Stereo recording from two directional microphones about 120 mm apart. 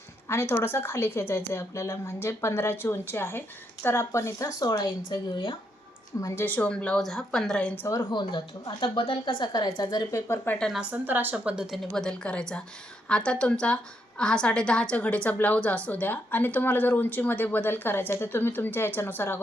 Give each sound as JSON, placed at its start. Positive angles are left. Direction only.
{"t": 0.3, "sound": "a woman's voice", "side_deg": 20}
{"t": 6.1, "sound": "a woman's voice", "side_deg": 25}
{"t": 6.4, "sound": "a woman's voice", "side_deg": 15}
{"t": 7.8, "sound": "a woman's voice", "side_deg": 25}
{"t": 8.1, "sound": "a woman's voice", "side_deg": 40}
{"t": 10.9, "sound": "a woman's voice", "side_deg": -15}